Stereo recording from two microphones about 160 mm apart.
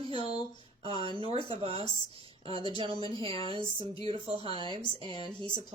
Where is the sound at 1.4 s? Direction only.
35° right (ahead or behind).